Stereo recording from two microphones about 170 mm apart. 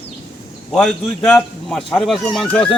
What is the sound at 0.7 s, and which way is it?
A man's voice, 5° left (ahead or behind).